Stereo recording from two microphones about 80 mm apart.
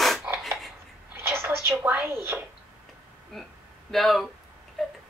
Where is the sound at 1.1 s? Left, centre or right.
Right.